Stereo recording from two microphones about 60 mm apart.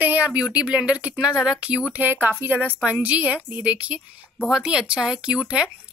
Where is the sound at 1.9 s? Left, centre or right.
Right.